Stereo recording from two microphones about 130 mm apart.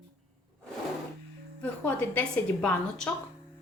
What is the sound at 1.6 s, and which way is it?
A woman's voice, 10° left (ahead or behind).